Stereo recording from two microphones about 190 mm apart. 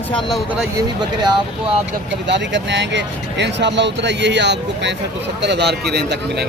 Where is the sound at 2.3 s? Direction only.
65° right (ahead or behind).